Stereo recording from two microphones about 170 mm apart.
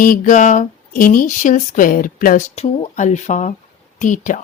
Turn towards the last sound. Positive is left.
turn(degrees=50)  # may be behind; listen again after turning